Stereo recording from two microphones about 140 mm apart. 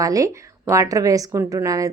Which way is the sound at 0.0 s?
25° right (ahead or behind).